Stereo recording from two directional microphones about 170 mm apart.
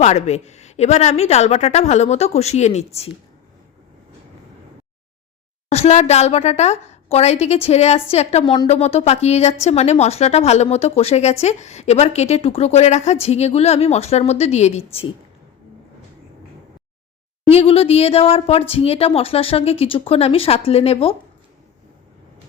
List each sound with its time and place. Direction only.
0.0 s a woman's voice: 40° left (ahead or behind)
5.6 s a woman's voice: 40° left (ahead or behind)
17.5 s a woman's voice: 35° left (ahead or behind)